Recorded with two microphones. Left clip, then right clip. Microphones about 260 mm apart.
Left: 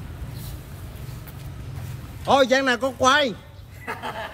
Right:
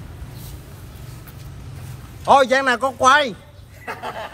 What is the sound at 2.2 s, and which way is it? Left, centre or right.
A man's voice, centre.